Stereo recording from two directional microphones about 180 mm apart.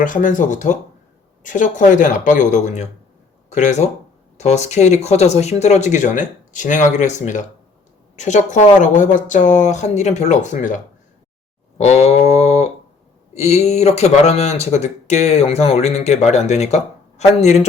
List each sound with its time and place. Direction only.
0.0 s speech: 45° left (ahead or behind)
11.8 s speech: 35° left (ahead or behind)